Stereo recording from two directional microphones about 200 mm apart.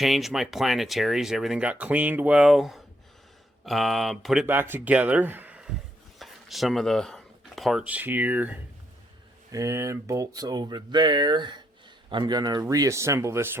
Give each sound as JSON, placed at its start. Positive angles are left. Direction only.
{"t": 0.0, "sound": "speech", "side_deg": 0}